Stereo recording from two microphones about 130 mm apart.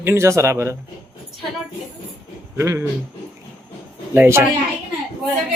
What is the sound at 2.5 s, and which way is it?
Speech, 25° right (ahead or behind).